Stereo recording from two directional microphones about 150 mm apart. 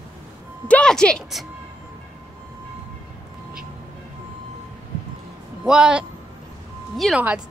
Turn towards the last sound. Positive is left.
turn(degrees=0)  # may be behind; listen again after turning